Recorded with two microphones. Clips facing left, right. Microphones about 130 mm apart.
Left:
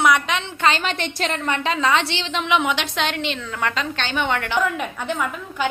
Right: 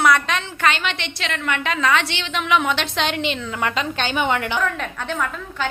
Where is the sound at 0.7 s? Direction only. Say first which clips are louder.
Left 1 dB; 40° left (ahead or behind); by 3.0 s 15° left (ahead or behind).